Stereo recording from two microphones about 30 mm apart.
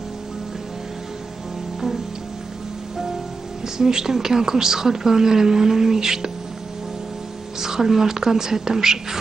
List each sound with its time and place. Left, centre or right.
3.6 s a woman's voice: centre
7.6 s a woman's voice: centre